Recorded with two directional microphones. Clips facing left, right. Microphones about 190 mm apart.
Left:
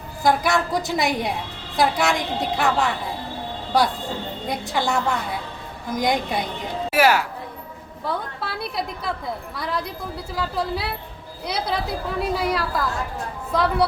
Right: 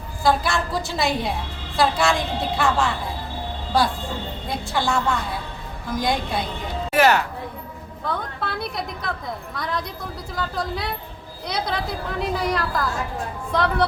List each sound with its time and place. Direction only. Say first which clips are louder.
0.2 s a woman's voice: left 1 dB; 15° left (ahead or behind)
4.4 s a woman's voice: even; 20° left (ahead or behind)